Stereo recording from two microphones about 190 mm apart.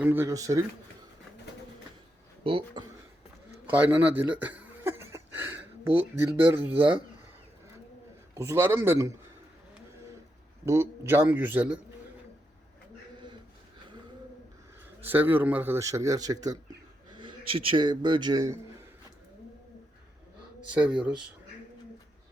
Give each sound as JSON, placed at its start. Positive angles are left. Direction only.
{"t": 0.0, "sound": "speech", "side_deg": -10}
{"t": 2.4, "sound": "speech", "side_deg": -30}
{"t": 3.7, "sound": "a sound", "side_deg": -10}
{"t": 8.4, "sound": "speech", "side_deg": -15}
{"t": 10.7, "sound": "speech", "side_deg": -15}
{"t": 15.0, "sound": "a man's voice", "side_deg": -10}
{"t": 20.7, "sound": "speech", "side_deg": -5}